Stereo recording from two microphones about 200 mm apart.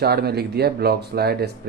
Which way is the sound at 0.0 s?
50° right (ahead or behind).